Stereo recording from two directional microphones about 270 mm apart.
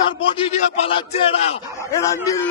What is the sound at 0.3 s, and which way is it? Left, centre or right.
A man's voice, left.